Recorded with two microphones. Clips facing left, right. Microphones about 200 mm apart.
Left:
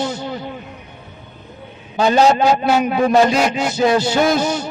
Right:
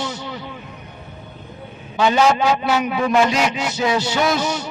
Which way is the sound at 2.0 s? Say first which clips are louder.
Left 3 dB; 40° left (ahead or behind).